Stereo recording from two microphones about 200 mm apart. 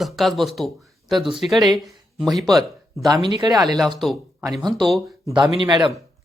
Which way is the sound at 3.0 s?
20° right (ahead or behind).